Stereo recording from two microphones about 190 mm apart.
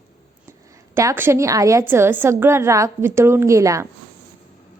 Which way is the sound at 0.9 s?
15° right (ahead or behind).